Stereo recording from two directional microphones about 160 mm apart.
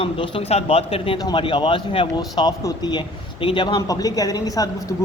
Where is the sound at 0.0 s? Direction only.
35° left (ahead or behind).